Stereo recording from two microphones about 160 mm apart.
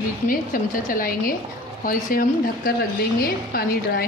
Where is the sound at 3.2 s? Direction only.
70° left (ahead or behind).